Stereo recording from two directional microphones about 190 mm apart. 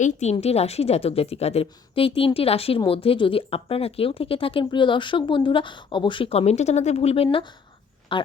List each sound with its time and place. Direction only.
0.0 s a woman's voice: 35° left (ahead or behind)